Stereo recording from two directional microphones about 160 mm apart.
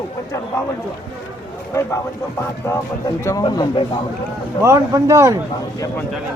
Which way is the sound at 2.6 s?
20° left (ahead or behind).